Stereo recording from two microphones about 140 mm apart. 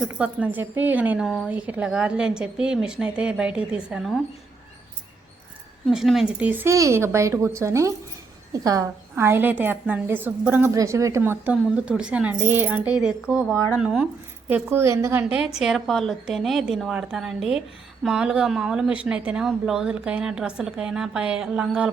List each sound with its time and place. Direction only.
0.1 s a woman's voice: 10° right (ahead or behind)
5.8 s a woman's voice: centre (ahead or behind)
14.5 s a woman's voice: 15° right (ahead or behind)
15.5 s a woman's voice: centre (ahead or behind)